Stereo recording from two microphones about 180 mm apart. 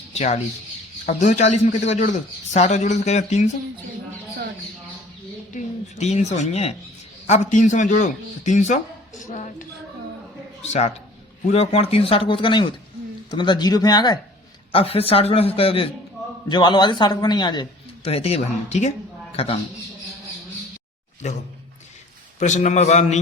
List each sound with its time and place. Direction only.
0.1 s speech: 35° left (ahead or behind)
5.5 s speech: 40° left (ahead or behind)
21.2 s speech: 40° left (ahead or behind)